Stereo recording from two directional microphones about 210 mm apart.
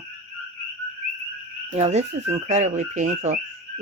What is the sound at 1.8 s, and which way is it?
Speech, 30° right (ahead or behind).